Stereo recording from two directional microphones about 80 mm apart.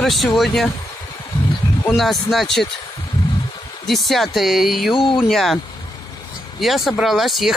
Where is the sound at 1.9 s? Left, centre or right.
Centre.